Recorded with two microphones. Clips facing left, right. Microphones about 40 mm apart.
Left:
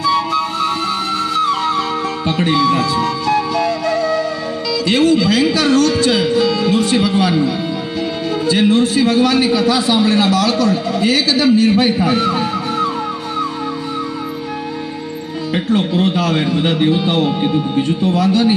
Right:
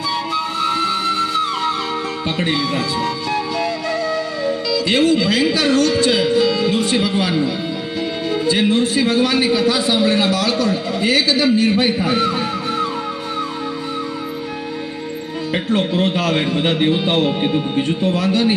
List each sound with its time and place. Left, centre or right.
0.0 s music: centre
8.4 s a man's voice: centre
12.0 s music: centre
16.1 s speech: right